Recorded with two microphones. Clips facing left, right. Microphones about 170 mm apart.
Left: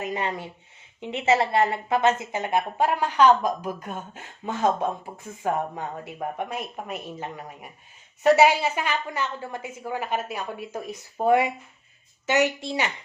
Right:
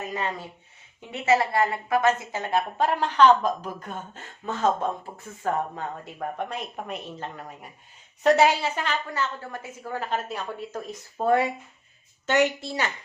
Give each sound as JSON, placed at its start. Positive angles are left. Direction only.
{"t": 0.0, "sound": "speech", "side_deg": 20}